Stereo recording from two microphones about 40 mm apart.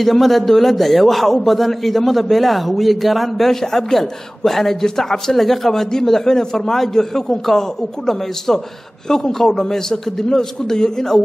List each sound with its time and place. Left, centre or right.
0.0 s a man's voice: centre
9.1 s a man's voice: centre